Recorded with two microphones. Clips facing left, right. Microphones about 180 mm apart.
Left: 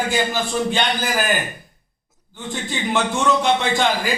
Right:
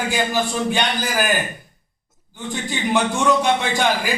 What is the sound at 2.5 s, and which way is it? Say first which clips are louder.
A man's voice: right 2 dB; 15° right (ahead or behind).